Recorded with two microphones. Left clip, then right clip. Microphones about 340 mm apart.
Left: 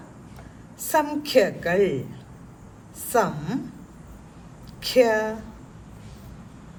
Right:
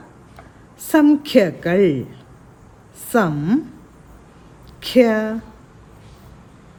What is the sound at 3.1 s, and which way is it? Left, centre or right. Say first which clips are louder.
Speech: right 4 dB; right.